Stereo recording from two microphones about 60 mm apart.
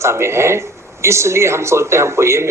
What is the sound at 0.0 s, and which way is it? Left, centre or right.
Speech, right.